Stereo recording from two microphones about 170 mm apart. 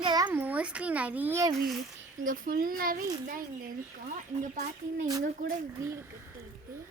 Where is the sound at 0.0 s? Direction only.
25° right (ahead or behind).